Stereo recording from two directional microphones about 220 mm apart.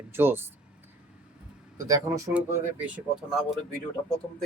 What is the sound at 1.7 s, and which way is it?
Speech, 15° right (ahead or behind).